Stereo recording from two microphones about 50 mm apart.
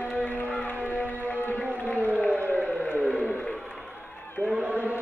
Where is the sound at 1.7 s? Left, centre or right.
Left.